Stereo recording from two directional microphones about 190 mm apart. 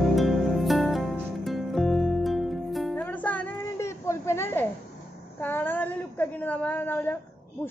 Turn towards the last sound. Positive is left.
turn(degrees=10)  # may be behind; listen again after turning